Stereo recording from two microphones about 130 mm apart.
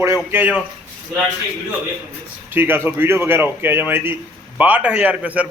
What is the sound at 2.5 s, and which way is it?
Speech, 15° right (ahead or behind).